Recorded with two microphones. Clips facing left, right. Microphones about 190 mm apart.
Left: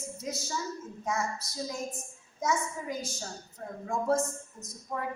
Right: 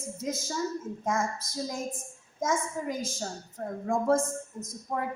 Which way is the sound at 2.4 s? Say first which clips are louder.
Right 2 dB; 50° right (ahead or behind).